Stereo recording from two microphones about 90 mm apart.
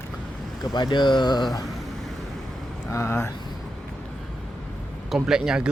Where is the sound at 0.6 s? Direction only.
55° left (ahead or behind).